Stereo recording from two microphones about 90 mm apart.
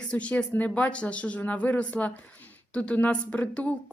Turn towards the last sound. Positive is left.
turn(degrees=15)  # may be behind; listen again after turning